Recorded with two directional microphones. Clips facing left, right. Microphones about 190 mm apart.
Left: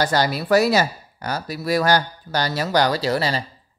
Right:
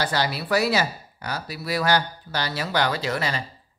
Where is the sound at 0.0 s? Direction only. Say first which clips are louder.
Left 5 dB; 45° left (ahead or behind).